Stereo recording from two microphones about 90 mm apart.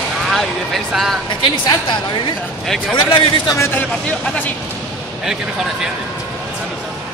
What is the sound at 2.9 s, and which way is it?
Speech, 65° left (ahead or behind).